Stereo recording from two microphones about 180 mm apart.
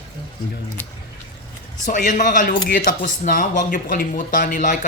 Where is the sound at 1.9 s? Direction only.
45° left (ahead or behind).